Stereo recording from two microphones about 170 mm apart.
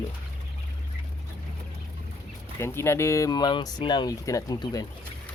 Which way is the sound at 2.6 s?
15° left (ahead or behind).